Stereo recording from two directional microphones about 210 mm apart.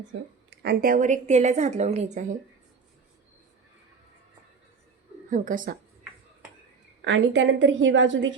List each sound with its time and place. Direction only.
0.6 s a woman's voice: 45° right (ahead or behind)
5.3 s a woman's voice: 40° right (ahead or behind)
7.0 s a woman's voice: 60° right (ahead or behind)